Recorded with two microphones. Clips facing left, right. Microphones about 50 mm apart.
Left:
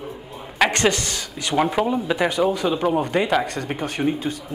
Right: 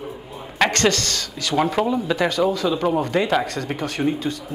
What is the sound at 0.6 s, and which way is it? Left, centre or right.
Speech, centre.